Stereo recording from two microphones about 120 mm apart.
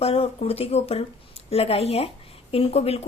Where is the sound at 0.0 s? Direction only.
55° left (ahead or behind).